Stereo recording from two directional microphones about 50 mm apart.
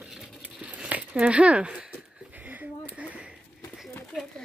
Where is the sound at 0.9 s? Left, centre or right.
Right.